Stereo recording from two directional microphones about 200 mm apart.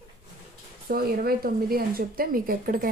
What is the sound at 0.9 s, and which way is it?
Speech, 50° right (ahead or behind).